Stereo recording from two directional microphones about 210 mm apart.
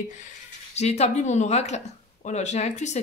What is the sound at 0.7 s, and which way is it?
Speech, 30° left (ahead or behind).